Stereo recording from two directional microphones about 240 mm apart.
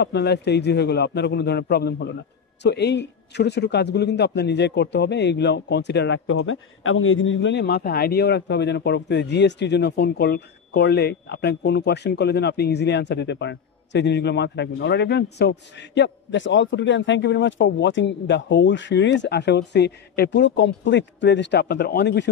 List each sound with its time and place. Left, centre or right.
0.0 s speech: left